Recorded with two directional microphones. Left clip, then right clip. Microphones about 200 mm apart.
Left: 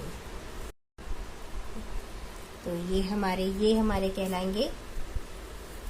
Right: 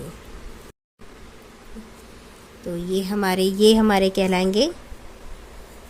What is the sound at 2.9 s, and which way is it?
A woman's voice, 35° right (ahead or behind).